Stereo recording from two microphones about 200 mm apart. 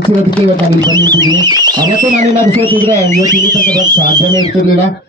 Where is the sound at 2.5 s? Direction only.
10° left (ahead or behind).